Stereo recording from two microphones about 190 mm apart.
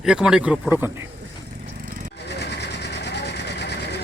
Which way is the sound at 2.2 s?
65° left (ahead or behind).